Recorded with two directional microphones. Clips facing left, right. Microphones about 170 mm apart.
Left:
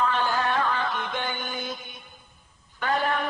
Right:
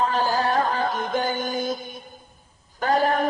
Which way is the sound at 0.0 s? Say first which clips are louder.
Right 3 dB; 35° right (ahead or behind).